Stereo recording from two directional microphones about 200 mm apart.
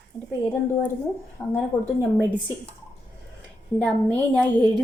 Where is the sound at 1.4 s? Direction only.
10° left (ahead or behind).